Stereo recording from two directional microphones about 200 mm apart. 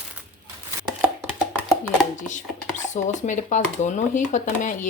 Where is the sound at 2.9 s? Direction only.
40° left (ahead or behind).